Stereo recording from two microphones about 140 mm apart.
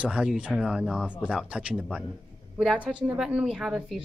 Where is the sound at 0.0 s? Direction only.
5° right (ahead or behind).